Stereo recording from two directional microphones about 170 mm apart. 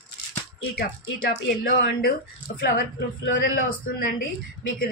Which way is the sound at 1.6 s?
60° left (ahead or behind).